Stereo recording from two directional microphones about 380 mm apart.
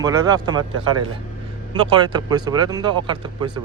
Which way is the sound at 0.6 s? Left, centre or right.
Right.